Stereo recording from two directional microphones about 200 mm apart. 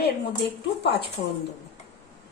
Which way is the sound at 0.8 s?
55° left (ahead or behind).